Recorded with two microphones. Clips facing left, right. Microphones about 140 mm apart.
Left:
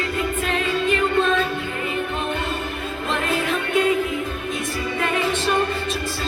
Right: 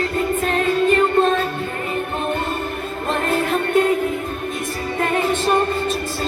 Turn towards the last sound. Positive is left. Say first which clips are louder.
# right 3 dB
turn(degrees=-45)  # may be behind; listen again after turning